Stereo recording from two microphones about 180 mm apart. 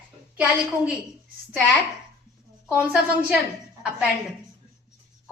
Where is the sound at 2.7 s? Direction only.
5° right (ahead or behind).